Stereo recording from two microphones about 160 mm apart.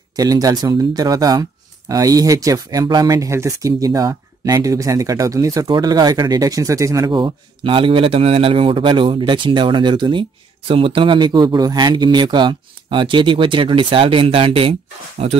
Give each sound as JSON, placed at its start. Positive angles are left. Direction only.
{"t": 0.1, "sound": "speech", "side_deg": -25}